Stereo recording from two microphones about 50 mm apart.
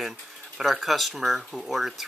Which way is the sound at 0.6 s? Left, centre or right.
Centre.